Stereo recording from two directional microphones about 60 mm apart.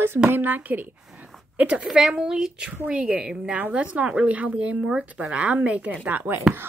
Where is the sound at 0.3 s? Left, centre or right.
Right.